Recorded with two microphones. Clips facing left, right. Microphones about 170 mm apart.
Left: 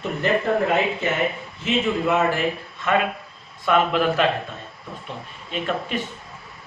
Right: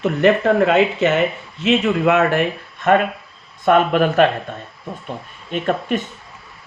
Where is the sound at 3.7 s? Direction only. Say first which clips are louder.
Right 5 dB; 50° right (ahead or behind).